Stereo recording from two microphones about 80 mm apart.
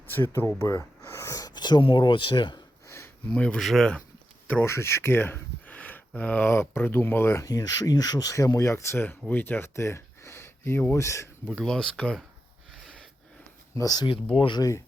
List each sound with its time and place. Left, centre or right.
0.1 s speech: left
2.8 s a sound: left
3.2 s speech: centre
3.6 s speech: centre
4.6 s speech: left
6.5 s speech: left
7.4 s speech: left
11.5 s speech: centre
13.7 s speech: left